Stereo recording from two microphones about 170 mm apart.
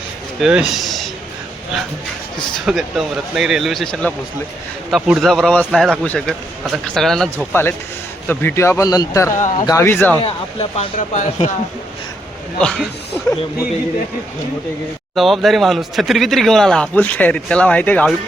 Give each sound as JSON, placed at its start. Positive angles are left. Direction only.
{"t": 0.4, "sound": "speech", "side_deg": -5}
{"t": 2.6, "sound": "speech", "side_deg": 0}
{"t": 7.5, "sound": "speech", "side_deg": 15}
{"t": 10.2, "sound": "speech", "side_deg": 35}
{"t": 12.5, "sound": "speech", "side_deg": 5}
{"t": 15.1, "sound": "speech", "side_deg": 0}